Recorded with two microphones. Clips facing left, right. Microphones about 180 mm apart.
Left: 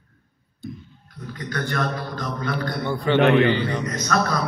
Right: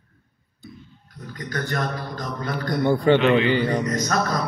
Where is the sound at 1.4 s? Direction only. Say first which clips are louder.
Left 1 dB; 40° right (ahead or behind).